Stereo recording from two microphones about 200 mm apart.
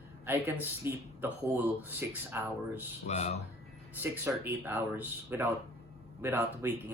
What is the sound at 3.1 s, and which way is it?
Speech, 35° left (ahead or behind).